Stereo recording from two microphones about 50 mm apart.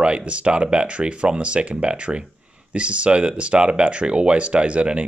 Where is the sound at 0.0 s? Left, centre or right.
Right.